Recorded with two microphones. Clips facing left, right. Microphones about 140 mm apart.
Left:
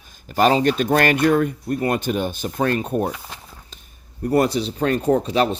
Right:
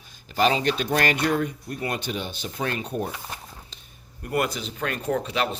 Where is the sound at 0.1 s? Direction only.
45° left (ahead or behind).